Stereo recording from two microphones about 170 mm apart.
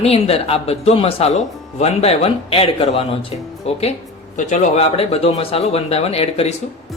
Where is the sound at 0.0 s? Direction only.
35° left (ahead or behind).